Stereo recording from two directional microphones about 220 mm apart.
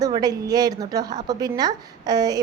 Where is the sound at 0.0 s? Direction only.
20° right (ahead or behind).